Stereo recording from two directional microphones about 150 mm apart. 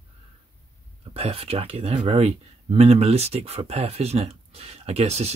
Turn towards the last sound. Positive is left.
turn(degrees=-45)  # may be behind; listen again after turning